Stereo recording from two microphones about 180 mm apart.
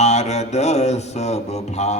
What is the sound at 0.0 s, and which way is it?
Mantra, 40° left (ahead or behind).